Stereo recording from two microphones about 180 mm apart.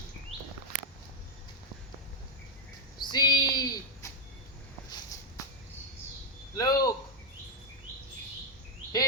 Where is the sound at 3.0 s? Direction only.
25° left (ahead or behind).